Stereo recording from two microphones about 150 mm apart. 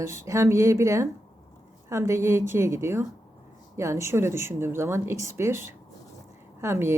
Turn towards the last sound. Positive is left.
turn(degrees=-15)  # may be behind; listen again after turning